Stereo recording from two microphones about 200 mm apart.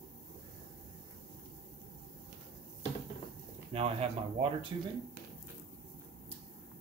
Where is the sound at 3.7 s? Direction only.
30° right (ahead or behind).